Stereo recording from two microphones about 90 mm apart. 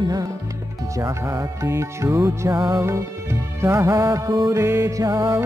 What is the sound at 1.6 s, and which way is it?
Music, 30° right (ahead or behind).